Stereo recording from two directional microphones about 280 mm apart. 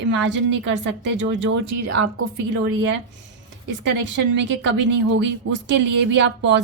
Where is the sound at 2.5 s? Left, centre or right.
Right.